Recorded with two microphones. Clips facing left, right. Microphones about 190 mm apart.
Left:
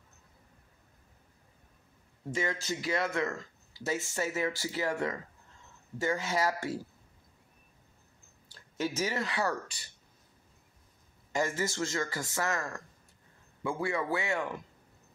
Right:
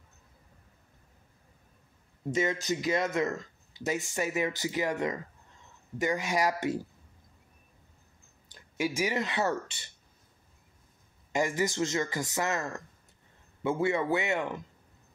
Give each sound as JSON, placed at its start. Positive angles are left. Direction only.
{"t": 2.3, "sound": "speech", "side_deg": -20}
{"t": 8.5, "sound": "speech", "side_deg": -15}
{"t": 11.3, "sound": "a man's voice", "side_deg": -15}